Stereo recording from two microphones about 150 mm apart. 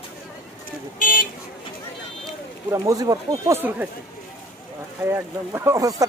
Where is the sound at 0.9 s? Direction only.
70° left (ahead or behind).